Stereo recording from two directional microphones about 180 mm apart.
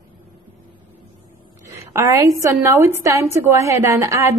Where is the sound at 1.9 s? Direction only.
15° right (ahead or behind).